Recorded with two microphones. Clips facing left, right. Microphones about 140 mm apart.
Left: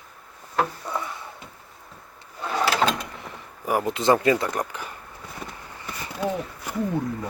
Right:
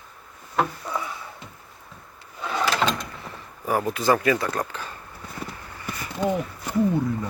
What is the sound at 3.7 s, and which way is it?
Speech, 15° left (ahead or behind).